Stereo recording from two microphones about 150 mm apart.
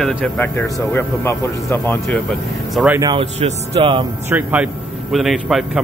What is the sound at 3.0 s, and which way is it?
Speech, 30° right (ahead or behind).